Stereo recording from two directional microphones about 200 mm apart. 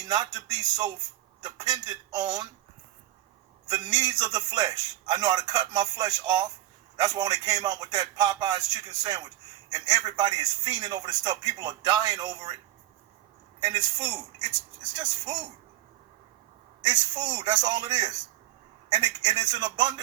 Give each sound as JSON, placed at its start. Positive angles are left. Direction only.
{"t": 0.0, "sound": "a man's voice", "side_deg": -20}
{"t": 3.7, "sound": "a man's voice", "side_deg": -20}
{"t": 13.6, "sound": "a man's voice", "side_deg": -20}
{"t": 17.2, "sound": "a man's voice", "side_deg": -20}